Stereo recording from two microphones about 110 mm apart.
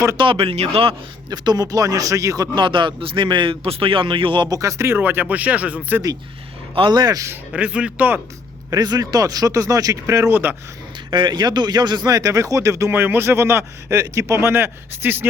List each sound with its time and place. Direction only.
0.2 s speech: 55° right (ahead or behind)
1.3 s speech: 35° right (ahead or behind)
2.6 s a man's voice: 50° right (ahead or behind)
4.4 s speech: 30° right (ahead or behind); by 6.0 s 15° right (ahead or behind)
6.7 s speech: 45° right (ahead or behind)
7.5 s speech: 10° right (ahead or behind)
8.7 s speech: 35° right (ahead or behind)
11.1 s speech: 45° right (ahead or behind); by 15.3 s 20° right (ahead or behind)